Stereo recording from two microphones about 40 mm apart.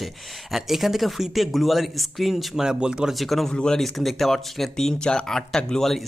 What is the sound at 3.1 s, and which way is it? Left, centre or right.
Speech, centre.